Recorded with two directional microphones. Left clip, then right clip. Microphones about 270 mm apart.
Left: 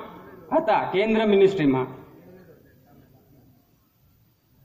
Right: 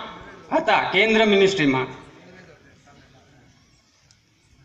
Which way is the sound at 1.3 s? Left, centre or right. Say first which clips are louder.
Right 1 dB; right.